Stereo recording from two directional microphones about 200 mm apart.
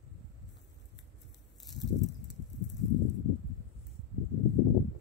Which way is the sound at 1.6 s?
60° left (ahead or behind).